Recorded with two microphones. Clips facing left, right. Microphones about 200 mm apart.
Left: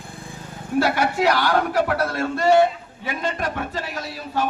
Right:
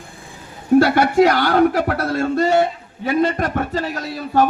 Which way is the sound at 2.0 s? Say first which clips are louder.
Right 5 dB; 45° right (ahead or behind).